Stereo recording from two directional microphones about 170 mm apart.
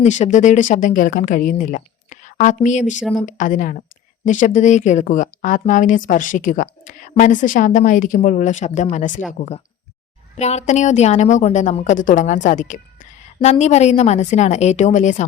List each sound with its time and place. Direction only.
0.0 s a woman's voice: 45° left (ahead or behind)
10.3 s a woman's voice: 40° left (ahead or behind)